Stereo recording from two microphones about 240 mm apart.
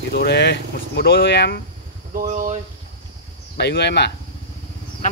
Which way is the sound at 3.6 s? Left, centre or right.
Left.